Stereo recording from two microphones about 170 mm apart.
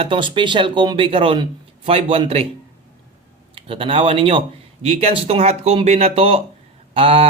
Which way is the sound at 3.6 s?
35° right (ahead or behind).